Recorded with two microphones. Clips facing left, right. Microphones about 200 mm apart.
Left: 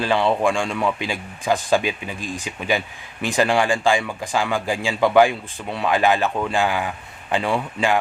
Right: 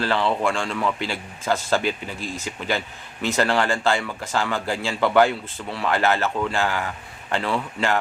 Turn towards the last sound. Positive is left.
turn(degrees=15)  # may be behind; listen again after turning